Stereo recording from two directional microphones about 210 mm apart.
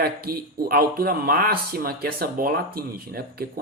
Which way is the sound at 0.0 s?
45° right (ahead or behind).